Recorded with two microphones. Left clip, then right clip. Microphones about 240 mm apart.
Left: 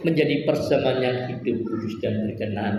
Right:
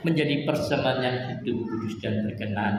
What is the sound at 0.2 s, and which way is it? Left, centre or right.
Speech, right.